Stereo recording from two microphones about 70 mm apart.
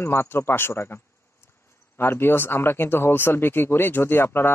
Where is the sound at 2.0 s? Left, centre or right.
Left.